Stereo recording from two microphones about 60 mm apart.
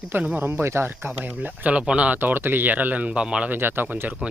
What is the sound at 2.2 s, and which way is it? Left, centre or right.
Speech, right.